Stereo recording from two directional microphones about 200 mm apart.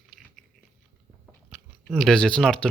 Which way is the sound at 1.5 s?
Centre (ahead or behind).